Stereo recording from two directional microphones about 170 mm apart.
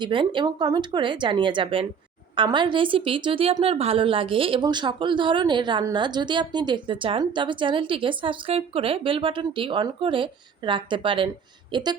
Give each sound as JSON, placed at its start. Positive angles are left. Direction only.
{"t": 0.0, "sound": "a woman's voice", "side_deg": -30}